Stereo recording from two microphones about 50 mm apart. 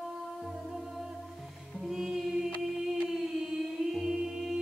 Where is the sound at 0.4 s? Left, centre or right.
Centre.